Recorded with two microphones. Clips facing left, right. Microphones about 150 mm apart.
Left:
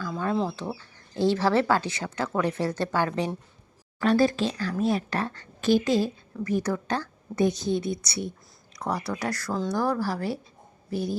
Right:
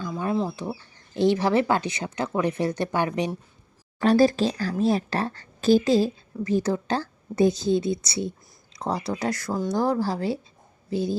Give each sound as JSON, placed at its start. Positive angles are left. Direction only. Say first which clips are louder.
{"t": 0.4, "sound": "speech", "louder": "right 1 dB", "side_deg": -10}
{"t": 4.0, "sound": "a woman's voice", "louder": "right 3 dB", "side_deg": -35}